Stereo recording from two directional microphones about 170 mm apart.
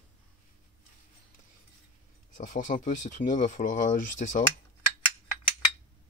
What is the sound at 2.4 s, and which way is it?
Speech, 50° left (ahead or behind).